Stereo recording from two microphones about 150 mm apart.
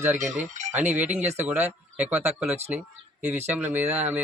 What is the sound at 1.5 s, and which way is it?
A man's voice, 10° right (ahead or behind).